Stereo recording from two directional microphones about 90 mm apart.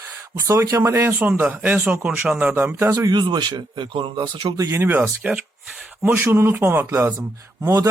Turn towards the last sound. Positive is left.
turn(degrees=-35)  # may be behind; listen again after turning